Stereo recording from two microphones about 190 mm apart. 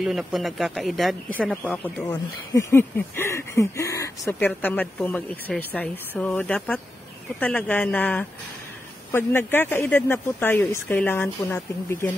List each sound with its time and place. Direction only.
0.0 s speech: centre (ahead or behind); by 12.1 s 15° left (ahead or behind)